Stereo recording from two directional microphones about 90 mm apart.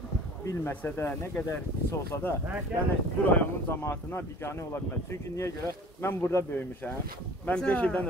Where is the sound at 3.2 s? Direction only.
20° left (ahead or behind).